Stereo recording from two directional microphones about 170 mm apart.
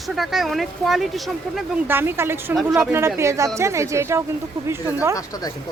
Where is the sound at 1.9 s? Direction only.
15° right (ahead or behind).